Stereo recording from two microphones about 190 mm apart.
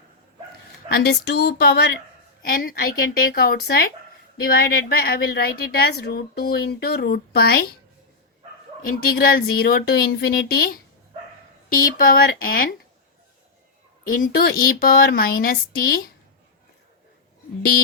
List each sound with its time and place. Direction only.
0.9 s a sound: 55° left (ahead or behind)
2.5 s a woman's voice: 45° left (ahead or behind)
8.8 s a woman's voice: 50° left (ahead or behind)
14.2 s a woman's voice: 50° left (ahead or behind)